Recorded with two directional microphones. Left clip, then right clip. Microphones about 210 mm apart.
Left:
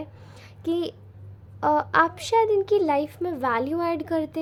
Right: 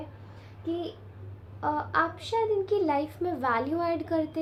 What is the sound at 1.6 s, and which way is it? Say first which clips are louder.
A woman's voice: left 7 dB; 40° left (ahead or behind).